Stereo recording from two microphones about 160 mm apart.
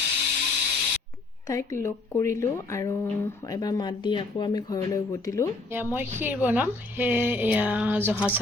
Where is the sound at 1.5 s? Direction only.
20° left (ahead or behind).